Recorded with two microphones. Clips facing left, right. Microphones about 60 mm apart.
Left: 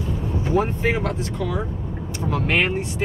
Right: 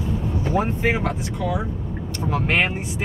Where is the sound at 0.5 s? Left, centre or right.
Centre.